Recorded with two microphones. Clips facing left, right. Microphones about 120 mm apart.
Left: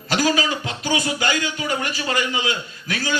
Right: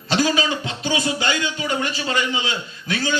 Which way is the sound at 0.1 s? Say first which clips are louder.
Even; 25° right (ahead or behind).